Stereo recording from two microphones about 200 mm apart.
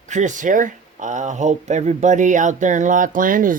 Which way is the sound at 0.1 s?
40° right (ahead or behind).